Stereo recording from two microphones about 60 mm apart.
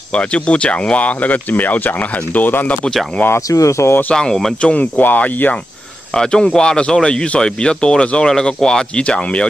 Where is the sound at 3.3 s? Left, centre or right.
Left.